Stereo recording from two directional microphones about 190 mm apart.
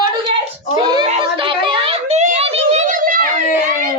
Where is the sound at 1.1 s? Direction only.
25° right (ahead or behind); by 3.5 s 45° right (ahead or behind).